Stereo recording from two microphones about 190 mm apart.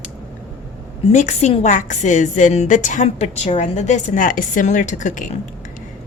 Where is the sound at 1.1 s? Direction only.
40° left (ahead or behind).